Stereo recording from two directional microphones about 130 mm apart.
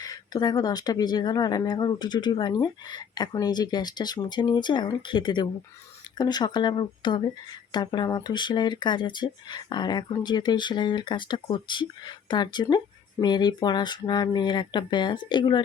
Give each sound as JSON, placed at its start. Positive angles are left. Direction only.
{"t": 0.0, "sound": "speech", "side_deg": 30}